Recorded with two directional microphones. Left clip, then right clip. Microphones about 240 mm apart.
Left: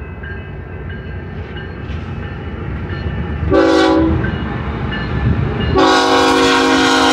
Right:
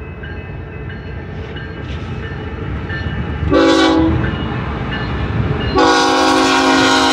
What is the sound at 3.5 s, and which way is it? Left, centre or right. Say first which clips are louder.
Train: even; right.